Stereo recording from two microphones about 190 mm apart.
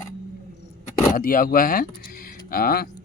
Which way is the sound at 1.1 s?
50° left (ahead or behind).